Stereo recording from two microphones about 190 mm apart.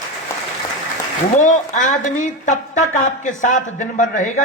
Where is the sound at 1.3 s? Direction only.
40° left (ahead or behind).